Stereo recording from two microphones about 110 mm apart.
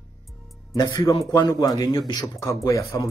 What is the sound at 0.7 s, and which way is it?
A man's voice, 35° left (ahead or behind).